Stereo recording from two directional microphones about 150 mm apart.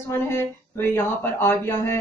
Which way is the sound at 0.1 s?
15° left (ahead or behind).